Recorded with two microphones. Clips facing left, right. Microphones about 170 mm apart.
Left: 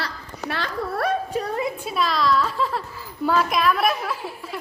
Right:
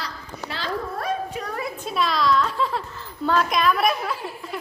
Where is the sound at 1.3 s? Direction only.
30° left (ahead or behind).